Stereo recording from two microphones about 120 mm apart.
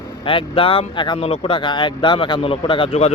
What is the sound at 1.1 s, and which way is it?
Speech, 55° left (ahead or behind).